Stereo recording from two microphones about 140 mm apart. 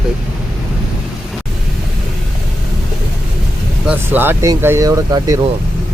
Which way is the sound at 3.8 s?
10° right (ahead or behind).